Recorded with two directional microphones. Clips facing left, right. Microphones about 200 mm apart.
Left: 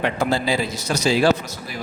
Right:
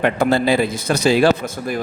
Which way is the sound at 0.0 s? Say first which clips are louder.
Right 5 dB; 55° right (ahead or behind).